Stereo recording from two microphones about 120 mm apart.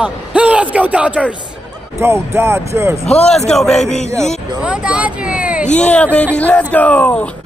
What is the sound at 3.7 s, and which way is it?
Speech, 70° left (ahead or behind).